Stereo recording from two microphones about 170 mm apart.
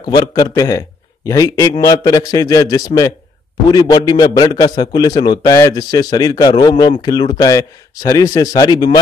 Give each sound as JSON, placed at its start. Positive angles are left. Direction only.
{"t": 0.0, "sound": "a man's voice", "side_deg": 25}